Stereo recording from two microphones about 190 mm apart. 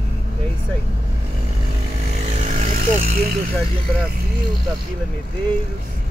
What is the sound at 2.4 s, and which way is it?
Vehicle, 40° right (ahead or behind).